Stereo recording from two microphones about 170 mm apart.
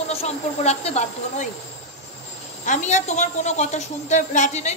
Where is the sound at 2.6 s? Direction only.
45° left (ahead or behind).